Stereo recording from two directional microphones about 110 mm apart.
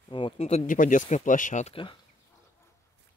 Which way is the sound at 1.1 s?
90° left.